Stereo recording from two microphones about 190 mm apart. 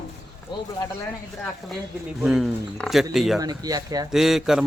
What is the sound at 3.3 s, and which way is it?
Speech, 20° right (ahead or behind).